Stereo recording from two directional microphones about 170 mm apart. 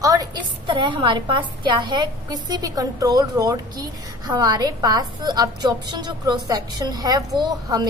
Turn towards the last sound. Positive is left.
turn(degrees=-25)  # may be behind; listen again after turning